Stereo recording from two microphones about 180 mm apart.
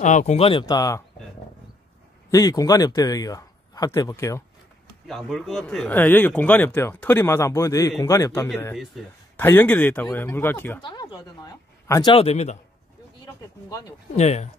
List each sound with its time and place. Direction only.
0.0 s speech: 40° left (ahead or behind); by 1.0 s 20° left (ahead or behind)
2.3 s speech: 20° left (ahead or behind)
5.0 s speech: centre (ahead or behind)
9.0 s speech: centre (ahead or behind)
9.4 s speech: 10° left (ahead or behind)
10.8 s speech: 25° left (ahead or behind)
14.1 s speech: 35° left (ahead or behind)